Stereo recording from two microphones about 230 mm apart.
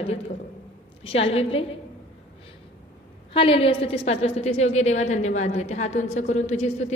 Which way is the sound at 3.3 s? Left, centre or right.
Left.